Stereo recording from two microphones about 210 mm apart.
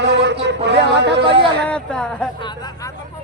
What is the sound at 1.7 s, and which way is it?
Speech, 5° left (ahead or behind).